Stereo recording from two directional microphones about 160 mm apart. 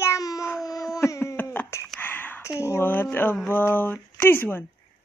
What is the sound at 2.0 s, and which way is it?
Whispering, 10° left (ahead or behind).